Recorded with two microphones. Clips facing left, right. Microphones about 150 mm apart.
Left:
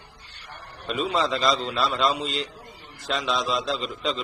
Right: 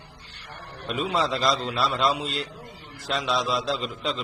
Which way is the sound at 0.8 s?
5° right (ahead or behind).